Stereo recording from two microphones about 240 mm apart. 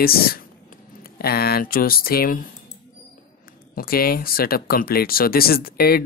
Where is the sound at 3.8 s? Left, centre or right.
Left.